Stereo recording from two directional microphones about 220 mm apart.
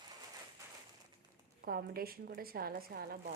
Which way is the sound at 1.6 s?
45° right (ahead or behind).